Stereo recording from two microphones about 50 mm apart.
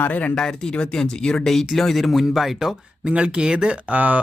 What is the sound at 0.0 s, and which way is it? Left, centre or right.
Speech, left.